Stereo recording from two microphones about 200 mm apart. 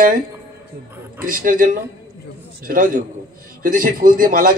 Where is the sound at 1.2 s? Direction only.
45° right (ahead or behind).